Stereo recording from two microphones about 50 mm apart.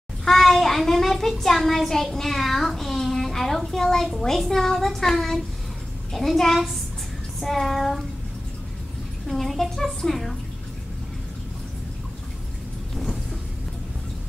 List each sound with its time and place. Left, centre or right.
0.2 s a child's voice: centre
9.3 s a woman's voice: centre
12.9 s vehicle: centre